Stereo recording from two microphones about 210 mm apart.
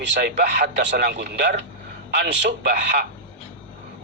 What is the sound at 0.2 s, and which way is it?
A man's voice, 50° right (ahead or behind).